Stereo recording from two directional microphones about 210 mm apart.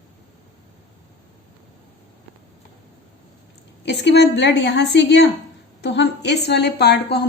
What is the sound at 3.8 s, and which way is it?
A woman's voice, 55° left (ahead or behind).